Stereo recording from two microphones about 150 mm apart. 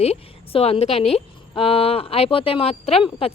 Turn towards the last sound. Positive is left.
turn(degrees=40)  # may be behind; listen again after turning